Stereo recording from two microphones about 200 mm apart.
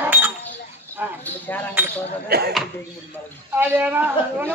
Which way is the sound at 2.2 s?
50° right (ahead or behind).